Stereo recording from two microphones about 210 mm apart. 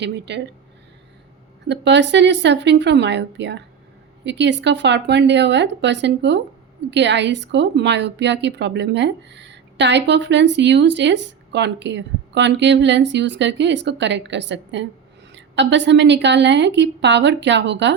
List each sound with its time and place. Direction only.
0.0 s speech: 55° right (ahead or behind)
1.6 s speech: 55° right (ahead or behind)